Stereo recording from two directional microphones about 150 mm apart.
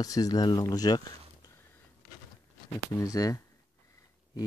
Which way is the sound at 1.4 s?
15° left (ahead or behind).